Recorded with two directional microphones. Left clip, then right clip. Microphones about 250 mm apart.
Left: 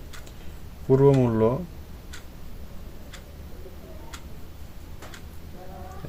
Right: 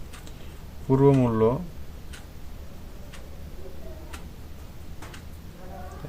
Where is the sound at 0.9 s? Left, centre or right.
Centre.